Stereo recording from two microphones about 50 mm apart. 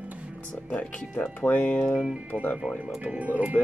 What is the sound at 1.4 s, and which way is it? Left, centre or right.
Speech, left.